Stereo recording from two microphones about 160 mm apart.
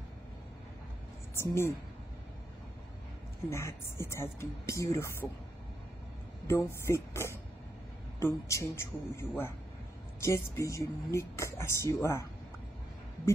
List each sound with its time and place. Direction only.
1.3 s a woman's voice: 15° left (ahead or behind)
3.4 s speech: 15° left (ahead or behind)
6.4 s speech: 15° left (ahead or behind)